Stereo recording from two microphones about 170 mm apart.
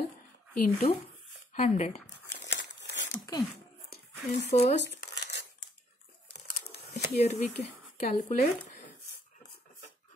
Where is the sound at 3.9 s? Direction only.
70° left (ahead or behind).